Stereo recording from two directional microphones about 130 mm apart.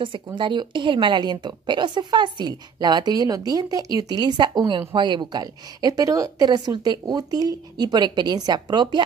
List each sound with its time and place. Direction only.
0.0 s a woman's voice: 40° right (ahead or behind)